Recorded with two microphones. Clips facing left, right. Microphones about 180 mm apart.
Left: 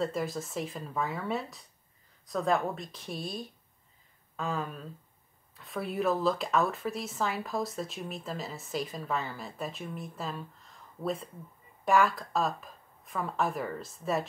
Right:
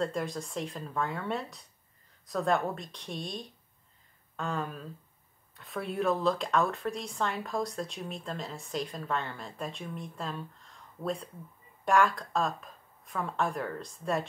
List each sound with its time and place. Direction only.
0.0 s speech: 5° left (ahead or behind)